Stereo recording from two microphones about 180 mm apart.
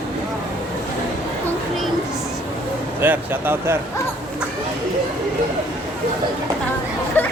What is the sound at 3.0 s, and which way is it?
Speech, 10° right (ahead or behind).